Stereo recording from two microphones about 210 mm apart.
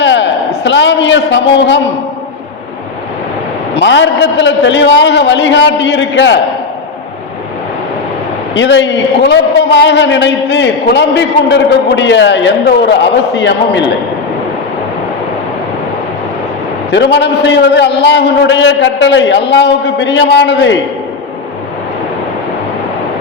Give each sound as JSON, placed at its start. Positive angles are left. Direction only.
{"t": 0.0, "sound": "a man's voice", "side_deg": 60}
{"t": 3.8, "sound": "a man's voice", "side_deg": 60}
{"t": 8.5, "sound": "a man's voice", "side_deg": 60}
{"t": 16.9, "sound": "a man's voice", "side_deg": 55}